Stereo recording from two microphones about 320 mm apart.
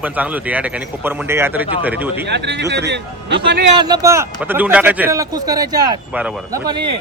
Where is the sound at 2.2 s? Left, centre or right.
Right.